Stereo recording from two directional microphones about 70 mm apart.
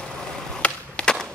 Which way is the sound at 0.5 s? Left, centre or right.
Centre.